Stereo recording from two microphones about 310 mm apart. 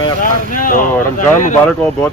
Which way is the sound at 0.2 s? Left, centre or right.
Left.